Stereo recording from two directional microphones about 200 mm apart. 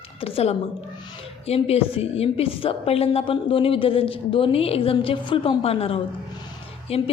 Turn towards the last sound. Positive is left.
turn(degrees=30)  # may be behind; listen again after turning